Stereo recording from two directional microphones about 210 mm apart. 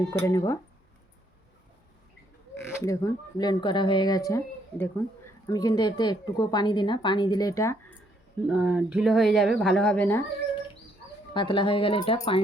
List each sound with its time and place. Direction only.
0.1 s speech: 15° left (ahead or behind)
2.6 s speech: 15° left (ahead or behind)
8.4 s speech: 5° right (ahead or behind)
11.3 s speech: 25° left (ahead or behind)